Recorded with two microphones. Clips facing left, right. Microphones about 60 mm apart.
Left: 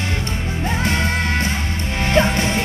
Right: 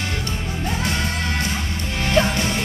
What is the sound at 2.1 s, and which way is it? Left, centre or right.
Music, left.